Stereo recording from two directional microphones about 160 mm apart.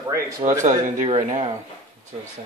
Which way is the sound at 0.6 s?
50° right (ahead or behind).